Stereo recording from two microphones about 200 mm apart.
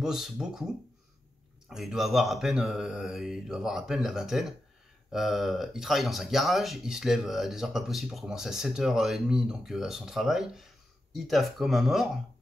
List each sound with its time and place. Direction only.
0.0 s speech: centre (ahead or behind)
1.7 s speech: centre (ahead or behind)